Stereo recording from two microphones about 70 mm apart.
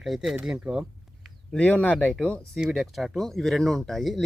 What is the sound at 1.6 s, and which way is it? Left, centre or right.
Speech, left.